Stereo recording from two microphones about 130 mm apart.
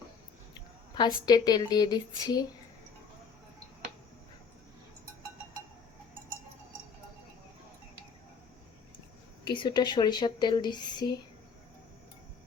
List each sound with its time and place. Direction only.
0.9 s speech: 35° left (ahead or behind)
9.5 s speech: 35° left (ahead or behind)